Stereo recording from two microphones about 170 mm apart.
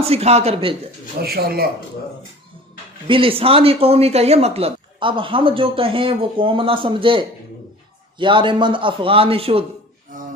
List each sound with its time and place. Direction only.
0.0 s speech: 35° right (ahead or behind)
1.2 s speech: 65° right (ahead or behind)
3.1 s a man's voice: 30° right (ahead or behind)
10.1 s music: 55° right (ahead or behind)